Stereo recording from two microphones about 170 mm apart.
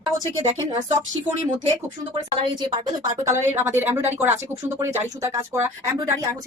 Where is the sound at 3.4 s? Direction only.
15° right (ahead or behind).